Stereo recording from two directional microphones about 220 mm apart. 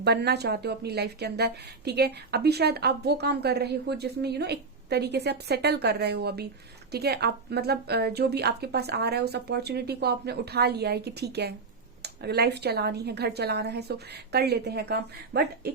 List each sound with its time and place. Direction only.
0.0 s a woman's voice: 50° right (ahead or behind)